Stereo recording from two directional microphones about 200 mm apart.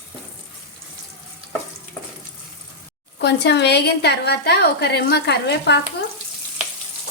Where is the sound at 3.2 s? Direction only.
55° left (ahead or behind).